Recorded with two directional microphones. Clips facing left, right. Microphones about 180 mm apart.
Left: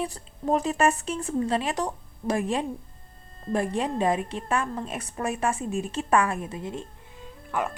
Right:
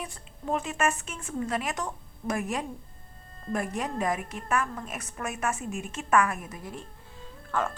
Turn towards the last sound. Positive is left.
turn(degrees=15)  # may be behind; listen again after turning